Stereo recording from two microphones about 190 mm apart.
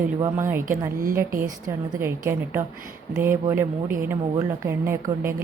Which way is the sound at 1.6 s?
15° right (ahead or behind).